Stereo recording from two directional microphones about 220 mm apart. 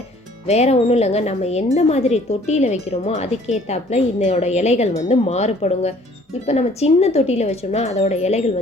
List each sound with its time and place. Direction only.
0.4 s speech: 30° left (ahead or behind)